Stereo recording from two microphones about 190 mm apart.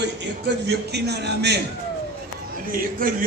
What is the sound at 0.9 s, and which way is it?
Speech, 60° right (ahead or behind).